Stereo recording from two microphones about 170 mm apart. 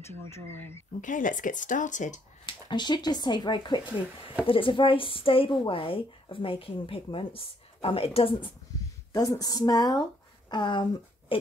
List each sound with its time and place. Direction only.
0.1 s speech: 10° left (ahead or behind)
1.0 s speech: 50° left (ahead or behind)
2.4 s a woman's voice: 25° left (ahead or behind)
9.1 s speech: 20° left (ahead or behind)